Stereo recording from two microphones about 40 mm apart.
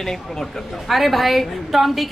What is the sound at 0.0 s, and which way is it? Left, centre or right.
A woman's voice, centre.